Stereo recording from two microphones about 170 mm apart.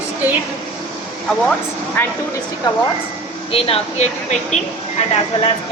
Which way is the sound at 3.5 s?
35° left (ahead or behind).